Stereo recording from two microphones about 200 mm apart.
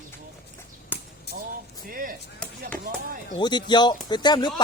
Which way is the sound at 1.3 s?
55° left (ahead or behind).